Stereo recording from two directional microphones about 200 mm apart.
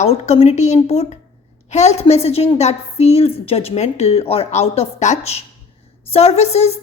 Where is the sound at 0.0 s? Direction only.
30° left (ahead or behind).